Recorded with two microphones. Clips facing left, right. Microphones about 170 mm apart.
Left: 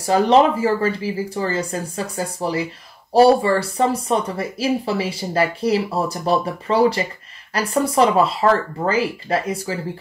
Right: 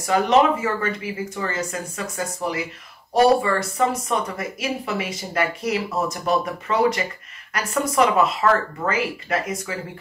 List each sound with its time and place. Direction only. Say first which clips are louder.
0.0 s speech: left 3 dB; 30° left (ahead or behind)